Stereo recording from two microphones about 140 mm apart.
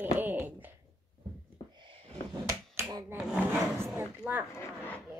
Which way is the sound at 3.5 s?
20° right (ahead or behind).